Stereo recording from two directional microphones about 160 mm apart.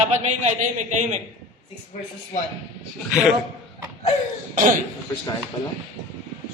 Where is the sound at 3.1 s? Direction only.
5° right (ahead or behind).